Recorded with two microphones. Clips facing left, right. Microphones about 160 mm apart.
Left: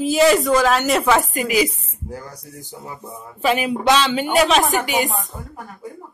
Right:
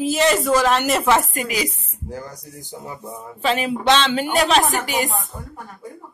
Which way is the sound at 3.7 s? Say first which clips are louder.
Left 1 dB; 5° left (ahead or behind).